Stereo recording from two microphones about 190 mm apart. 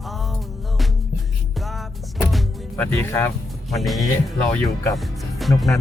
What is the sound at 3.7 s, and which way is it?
Speech, centre (ahead or behind).